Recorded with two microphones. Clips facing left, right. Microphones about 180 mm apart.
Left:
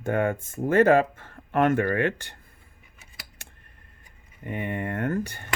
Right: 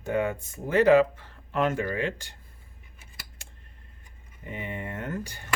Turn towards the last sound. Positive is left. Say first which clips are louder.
# left 7 dB
turn(degrees=55)  # may be behind; listen again after turning